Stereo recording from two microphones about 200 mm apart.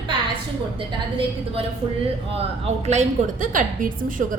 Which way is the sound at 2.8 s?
35° right (ahead or behind).